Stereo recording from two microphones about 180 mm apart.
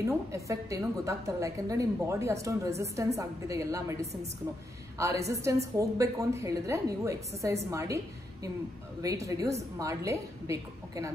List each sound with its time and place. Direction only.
0.3 s a woman's voice: 15° right (ahead or behind)
9.0 s a woman's voice: 15° right (ahead or behind)